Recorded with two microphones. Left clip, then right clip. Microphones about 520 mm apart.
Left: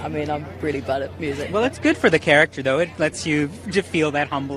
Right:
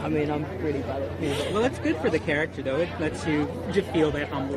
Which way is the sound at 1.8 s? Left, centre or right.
Left.